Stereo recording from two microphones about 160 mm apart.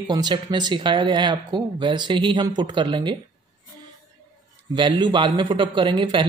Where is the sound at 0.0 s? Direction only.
25° right (ahead or behind).